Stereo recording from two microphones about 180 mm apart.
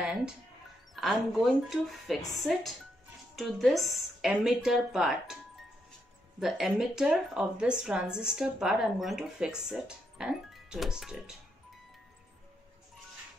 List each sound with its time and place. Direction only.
0.0 s music: 5° right (ahead or behind)
0.9 s speech: centre (ahead or behind)
6.4 s speech: centre (ahead or behind)